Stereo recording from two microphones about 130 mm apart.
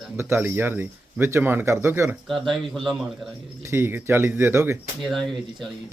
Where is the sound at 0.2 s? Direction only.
15° right (ahead or behind).